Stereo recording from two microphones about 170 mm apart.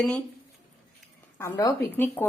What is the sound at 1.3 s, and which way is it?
Speech, 20° left (ahead or behind).